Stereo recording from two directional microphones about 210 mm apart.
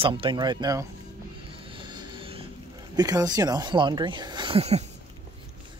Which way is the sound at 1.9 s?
25° right (ahead or behind).